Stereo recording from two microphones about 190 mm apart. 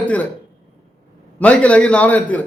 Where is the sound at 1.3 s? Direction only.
5° left (ahead or behind).